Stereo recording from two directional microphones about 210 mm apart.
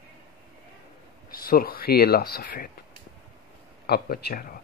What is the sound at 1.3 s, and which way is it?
Speech, 45° left (ahead or behind).